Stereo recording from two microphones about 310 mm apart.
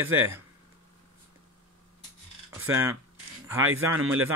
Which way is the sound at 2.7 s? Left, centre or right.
Centre.